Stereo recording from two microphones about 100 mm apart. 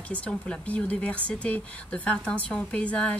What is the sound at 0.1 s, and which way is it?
Speech, 10° left (ahead or behind).